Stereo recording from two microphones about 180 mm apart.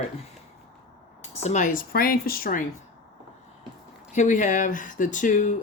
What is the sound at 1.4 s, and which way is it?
Speech, 40° left (ahead or behind).